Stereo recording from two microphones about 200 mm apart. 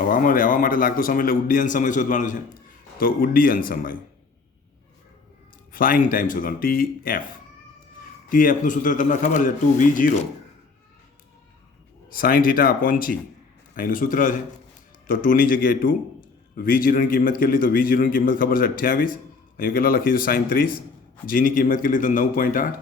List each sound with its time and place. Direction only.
0.0 s a man's voice: 45° left (ahead or behind)
5.7 s a man's voice: 45° left (ahead or behind)
12.0 s a man's voice: 45° left (ahead or behind)